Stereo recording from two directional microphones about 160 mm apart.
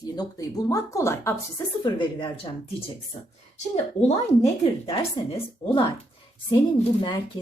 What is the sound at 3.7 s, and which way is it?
Speech, 40° left (ahead or behind).